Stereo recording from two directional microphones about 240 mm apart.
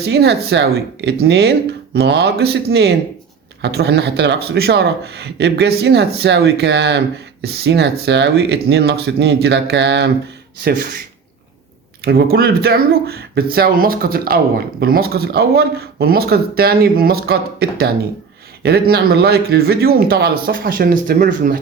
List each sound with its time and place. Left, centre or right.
0.0 s speech: right
12.0 s speech: right